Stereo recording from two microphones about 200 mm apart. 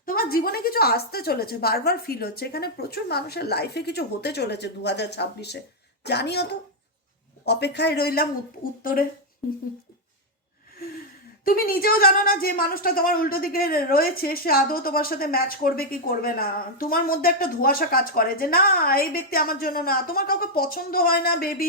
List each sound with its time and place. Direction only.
0.0 s speech: 45° left (ahead or behind)
11.4 s speech: 45° left (ahead or behind)